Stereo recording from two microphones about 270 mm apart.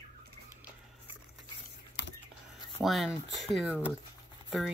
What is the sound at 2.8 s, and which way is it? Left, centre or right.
Speech, centre.